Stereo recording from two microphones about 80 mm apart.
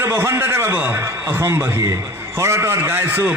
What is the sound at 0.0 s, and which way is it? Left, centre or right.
A man's voice, right.